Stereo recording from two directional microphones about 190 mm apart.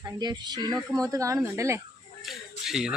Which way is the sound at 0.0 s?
20° right (ahead or behind).